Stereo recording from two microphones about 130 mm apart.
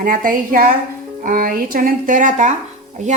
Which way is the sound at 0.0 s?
90° right.